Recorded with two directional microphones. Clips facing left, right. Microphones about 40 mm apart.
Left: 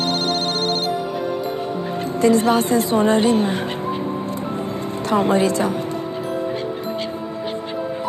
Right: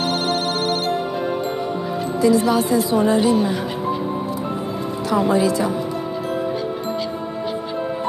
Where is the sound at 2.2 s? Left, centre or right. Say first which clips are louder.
Left 1 dB; left.